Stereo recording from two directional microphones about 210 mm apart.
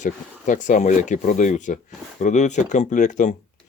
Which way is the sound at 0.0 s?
35° left (ahead or behind).